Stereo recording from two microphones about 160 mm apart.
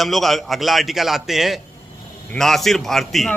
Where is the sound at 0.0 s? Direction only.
Centre (ahead or behind).